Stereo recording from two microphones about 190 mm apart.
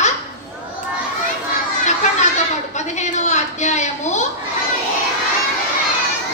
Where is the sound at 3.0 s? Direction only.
40° left (ahead or behind).